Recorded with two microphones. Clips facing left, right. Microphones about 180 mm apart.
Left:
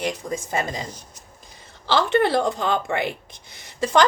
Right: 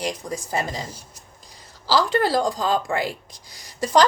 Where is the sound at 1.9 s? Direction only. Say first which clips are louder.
Left 1 dB; 25° left (ahead or behind).